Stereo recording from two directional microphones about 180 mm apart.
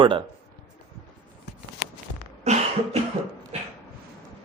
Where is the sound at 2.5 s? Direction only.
40° right (ahead or behind).